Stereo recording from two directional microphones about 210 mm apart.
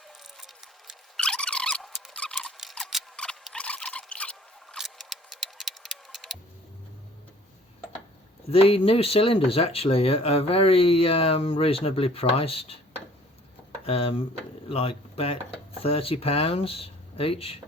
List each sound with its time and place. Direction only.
0.3 s a sound: centre (ahead or behind)
8.4 s speech: 25° left (ahead or behind)
13.8 s speech: 25° left (ahead or behind)